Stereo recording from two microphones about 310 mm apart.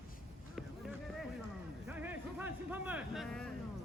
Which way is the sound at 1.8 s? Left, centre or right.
Centre.